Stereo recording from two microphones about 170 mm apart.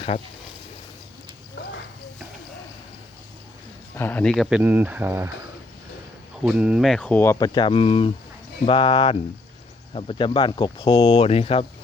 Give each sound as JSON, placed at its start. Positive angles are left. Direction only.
{"t": 3.9, "sound": "speech", "side_deg": 10}
{"t": 6.4, "sound": "speech", "side_deg": -5}